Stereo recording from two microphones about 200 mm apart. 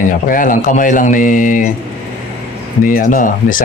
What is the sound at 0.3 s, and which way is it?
Speech, 40° left (ahead or behind).